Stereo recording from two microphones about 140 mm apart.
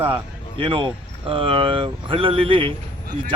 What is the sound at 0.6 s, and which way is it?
Speech, 35° right (ahead or behind).